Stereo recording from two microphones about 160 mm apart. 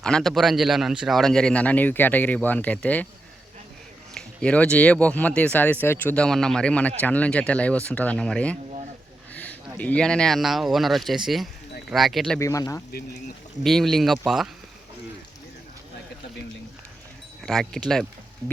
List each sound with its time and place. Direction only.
0.0 s a man's voice: 5° left (ahead or behind)
4.1 s speech: 5° left (ahead or behind)
9.3 s a sound: 10° left (ahead or behind)
9.7 s a man's voice: 10° left (ahead or behind)
12.4 s speech: 20° left (ahead or behind)
12.9 s speech: 75° left (ahead or behind)
13.7 s a man's voice: centre (ahead or behind)
17.4 s a man's voice: centre (ahead or behind)